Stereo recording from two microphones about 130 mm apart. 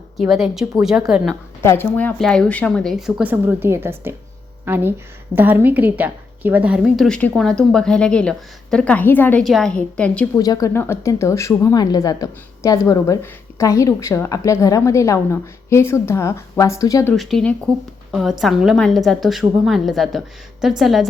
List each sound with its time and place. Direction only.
0.2 s a woman's voice: centre (ahead or behind)
1.6 s a woman's voice: 20° left (ahead or behind); by 3.2 s centre (ahead or behind)
3.2 s a woman's voice: 15° right (ahead or behind)
6.8 s a woman's voice: centre (ahead or behind)
9.4 s a woman's voice: centre (ahead or behind)
10.3 s a woman's voice: 30° left (ahead or behind)
17.2 s a woman's voice: centre (ahead or behind)